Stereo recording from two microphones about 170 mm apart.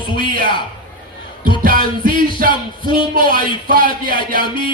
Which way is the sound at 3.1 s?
55° right (ahead or behind).